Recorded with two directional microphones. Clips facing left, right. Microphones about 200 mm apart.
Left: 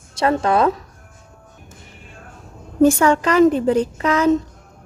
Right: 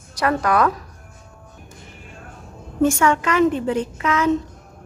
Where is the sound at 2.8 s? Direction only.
35° left (ahead or behind).